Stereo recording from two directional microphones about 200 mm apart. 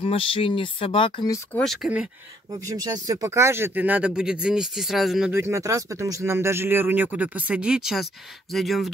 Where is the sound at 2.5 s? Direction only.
20° right (ahead or behind); by 5.3 s centre (ahead or behind).